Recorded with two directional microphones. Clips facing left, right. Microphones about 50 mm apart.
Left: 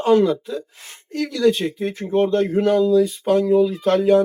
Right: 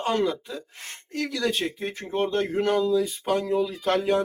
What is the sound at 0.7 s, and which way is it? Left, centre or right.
Speech, right.